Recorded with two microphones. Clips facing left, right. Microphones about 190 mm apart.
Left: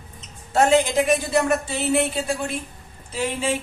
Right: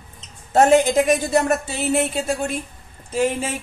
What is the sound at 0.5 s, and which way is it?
Speech, 45° right (ahead or behind).